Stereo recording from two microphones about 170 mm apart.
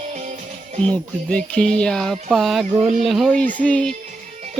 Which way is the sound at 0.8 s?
5° left (ahead or behind).